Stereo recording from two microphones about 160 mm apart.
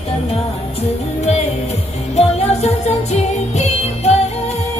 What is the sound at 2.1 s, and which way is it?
Music, 40° left (ahead or behind).